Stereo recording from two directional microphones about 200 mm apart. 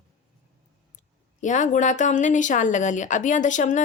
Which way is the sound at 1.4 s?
40° left (ahead or behind).